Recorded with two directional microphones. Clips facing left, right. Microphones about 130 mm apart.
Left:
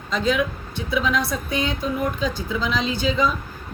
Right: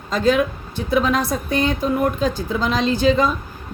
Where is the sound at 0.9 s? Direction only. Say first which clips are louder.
Right 4 dB; 50° right (ahead or behind).